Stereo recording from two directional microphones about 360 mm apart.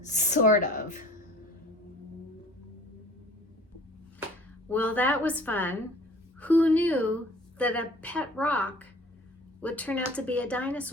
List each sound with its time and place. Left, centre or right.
0.0 s speech: centre
4.7 s speech: centre